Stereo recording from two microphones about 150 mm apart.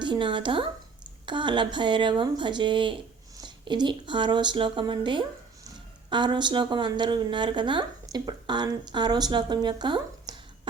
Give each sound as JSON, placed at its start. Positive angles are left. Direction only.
{"t": 0.0, "sound": "a woman's voice", "side_deg": -30}